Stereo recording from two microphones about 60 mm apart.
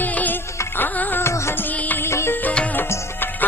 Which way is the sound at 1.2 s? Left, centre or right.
Left.